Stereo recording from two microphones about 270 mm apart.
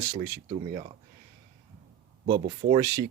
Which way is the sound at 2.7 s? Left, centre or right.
Centre.